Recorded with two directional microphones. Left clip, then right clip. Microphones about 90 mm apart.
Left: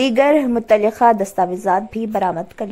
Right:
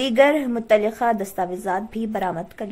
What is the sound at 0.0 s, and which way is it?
A woman's voice, 70° left (ahead or behind).